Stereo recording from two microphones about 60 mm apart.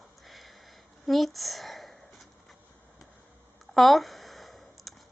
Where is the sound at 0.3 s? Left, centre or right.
Centre.